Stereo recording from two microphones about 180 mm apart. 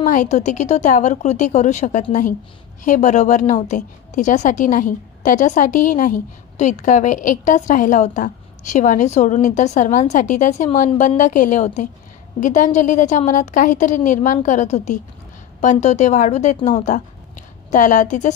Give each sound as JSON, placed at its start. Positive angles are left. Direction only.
{"t": 0.0, "sound": "a woman's voice", "side_deg": 45}